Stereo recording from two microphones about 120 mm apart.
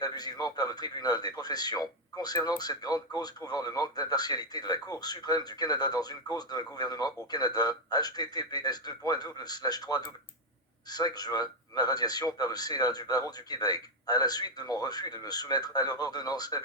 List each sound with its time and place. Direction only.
0.0 s speech: 35° left (ahead or behind)